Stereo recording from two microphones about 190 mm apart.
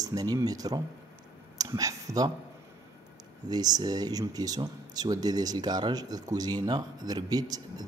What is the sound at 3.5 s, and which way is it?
Speech, 20° right (ahead or behind).